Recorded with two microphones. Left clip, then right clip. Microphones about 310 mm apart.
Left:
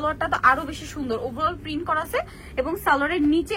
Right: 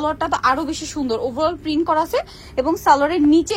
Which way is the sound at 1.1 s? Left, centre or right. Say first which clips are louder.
Right 5 dB; centre.